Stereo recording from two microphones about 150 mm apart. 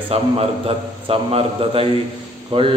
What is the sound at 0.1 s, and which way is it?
Speech, 40° right (ahead or behind).